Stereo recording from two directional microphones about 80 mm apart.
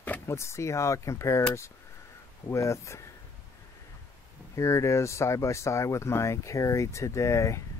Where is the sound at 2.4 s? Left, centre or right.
Left.